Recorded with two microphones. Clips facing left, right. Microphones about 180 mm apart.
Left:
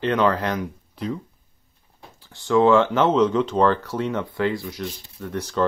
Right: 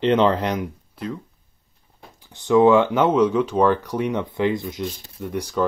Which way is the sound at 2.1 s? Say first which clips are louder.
Right 3 dB; 20° right (ahead or behind).